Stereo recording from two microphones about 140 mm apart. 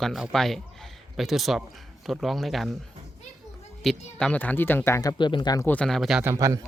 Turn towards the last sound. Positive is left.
turn(degrees=-20)  # may be behind; listen again after turning